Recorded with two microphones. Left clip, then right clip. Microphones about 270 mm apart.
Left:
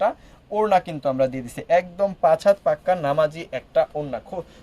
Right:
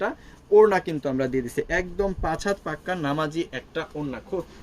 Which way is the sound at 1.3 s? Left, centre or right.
Left.